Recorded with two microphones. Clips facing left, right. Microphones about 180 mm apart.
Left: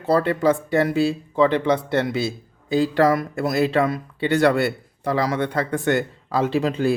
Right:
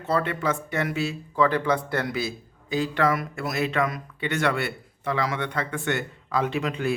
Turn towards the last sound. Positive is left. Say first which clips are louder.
# left 6 dB
turn(degrees=35)  # may be behind; listen again after turning